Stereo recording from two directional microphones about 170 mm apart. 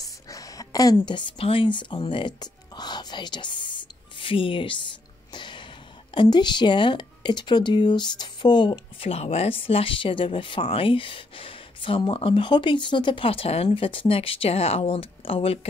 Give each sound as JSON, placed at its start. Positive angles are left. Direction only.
{"t": 0.3, "sound": "a woman's voice", "side_deg": 20}
{"t": 5.3, "sound": "throat clearing", "side_deg": 25}
{"t": 6.1, "sound": "speech", "side_deg": 25}